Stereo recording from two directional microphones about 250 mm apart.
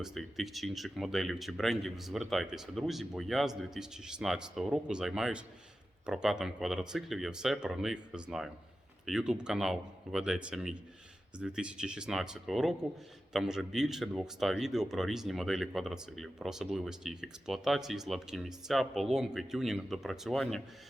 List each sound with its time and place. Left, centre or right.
0.0 s speech: centre